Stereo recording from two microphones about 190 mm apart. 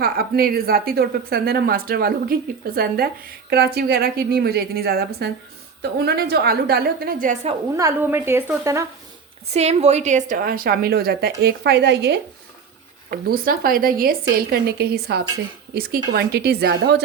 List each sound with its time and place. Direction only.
0.0 s a woman's voice: 50° right (ahead or behind)
7.8 s a woman's voice: 15° right (ahead or behind)
9.5 s a woman's voice: 35° right (ahead or behind); by 12.2 s 60° right (ahead or behind)
13.1 s a woman's voice: 50° right (ahead or behind)